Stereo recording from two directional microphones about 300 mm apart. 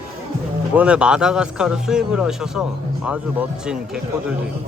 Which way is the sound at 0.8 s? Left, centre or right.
Centre.